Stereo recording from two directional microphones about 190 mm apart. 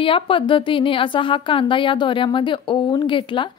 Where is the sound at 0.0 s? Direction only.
30° left (ahead or behind).